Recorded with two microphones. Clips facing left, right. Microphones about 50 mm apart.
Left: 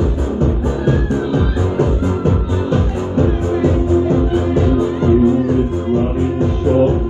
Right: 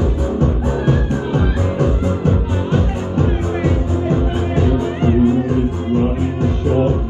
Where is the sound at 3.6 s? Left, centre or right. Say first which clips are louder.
Left 5 dB; right.